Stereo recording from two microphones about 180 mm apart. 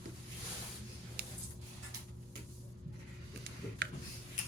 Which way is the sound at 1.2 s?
60° right (ahead or behind).